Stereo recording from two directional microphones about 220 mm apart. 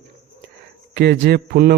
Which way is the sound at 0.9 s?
45° right (ahead or behind).